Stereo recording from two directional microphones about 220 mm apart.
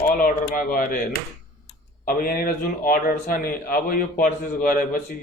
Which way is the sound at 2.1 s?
40° left (ahead or behind).